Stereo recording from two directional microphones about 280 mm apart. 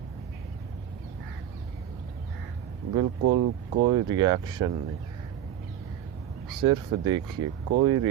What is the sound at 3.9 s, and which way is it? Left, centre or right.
Speech, centre.